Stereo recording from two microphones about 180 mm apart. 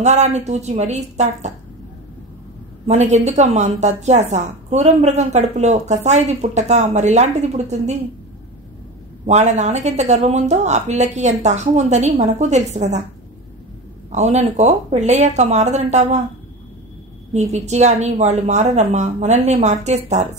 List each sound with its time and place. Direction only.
0.0 s a woman's voice: 40° right (ahead or behind)
2.9 s a woman's voice: 40° right (ahead or behind)
9.2 s a woman's voice: 40° right (ahead or behind)
14.1 s a woman's voice: 40° right (ahead or behind)
17.3 s a woman's voice: 40° right (ahead or behind)